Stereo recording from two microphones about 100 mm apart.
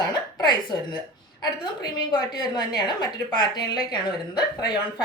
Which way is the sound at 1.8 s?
45° left (ahead or behind).